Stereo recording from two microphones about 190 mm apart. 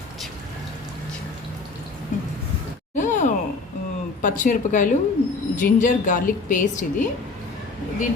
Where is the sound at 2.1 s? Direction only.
40° left (ahead or behind).